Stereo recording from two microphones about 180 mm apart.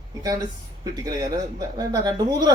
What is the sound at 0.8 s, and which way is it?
Speech, 20° right (ahead or behind).